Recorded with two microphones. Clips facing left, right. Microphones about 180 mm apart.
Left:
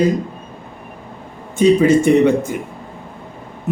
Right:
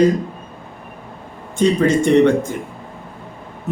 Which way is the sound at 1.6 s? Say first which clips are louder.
Left 3 dB; 5° left (ahead or behind).